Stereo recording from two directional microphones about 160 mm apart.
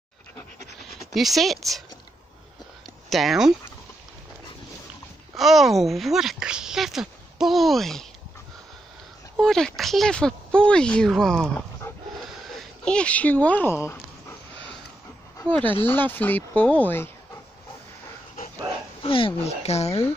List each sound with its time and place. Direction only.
1.1 s speech: centre (ahead or behind)
3.1 s speech: centre (ahead or behind)
5.3 s speech: centre (ahead or behind)
9.4 s speech: centre (ahead or behind)
15.3 s speech: 10° left (ahead or behind)
19.0 s speech: 35° left (ahead or behind)